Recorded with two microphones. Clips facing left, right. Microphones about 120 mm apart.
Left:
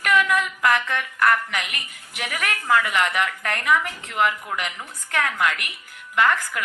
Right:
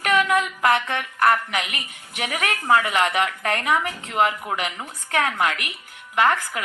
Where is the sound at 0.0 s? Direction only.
30° right (ahead or behind).